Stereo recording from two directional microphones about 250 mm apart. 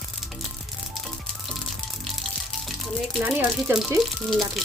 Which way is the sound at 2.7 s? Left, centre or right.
Centre.